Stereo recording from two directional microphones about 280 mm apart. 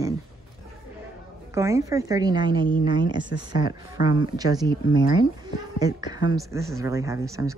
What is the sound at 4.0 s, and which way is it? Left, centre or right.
Speech, left.